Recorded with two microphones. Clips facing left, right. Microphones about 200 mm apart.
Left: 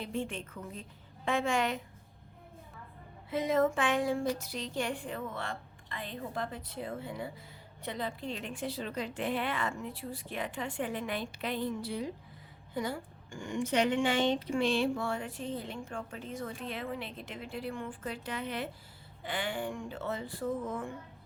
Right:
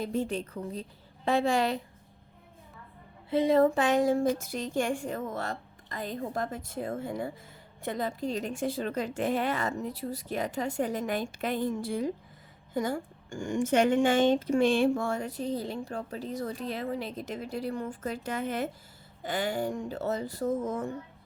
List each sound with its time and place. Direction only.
0.0 s a woman's voice: 40° right (ahead or behind)
3.2 s a woman's voice: 30° right (ahead or behind)